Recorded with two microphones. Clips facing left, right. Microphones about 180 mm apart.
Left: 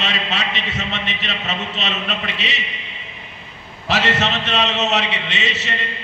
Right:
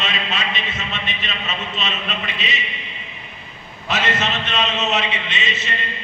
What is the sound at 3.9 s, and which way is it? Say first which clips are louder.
A man's voice: left 3 dB; 75° left (ahead or behind).